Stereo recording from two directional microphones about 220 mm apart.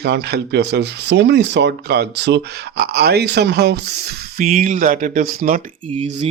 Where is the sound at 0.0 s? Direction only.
50° right (ahead or behind).